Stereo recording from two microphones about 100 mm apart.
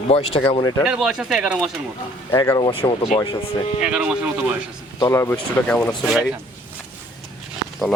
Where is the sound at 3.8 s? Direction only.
10° right (ahead or behind).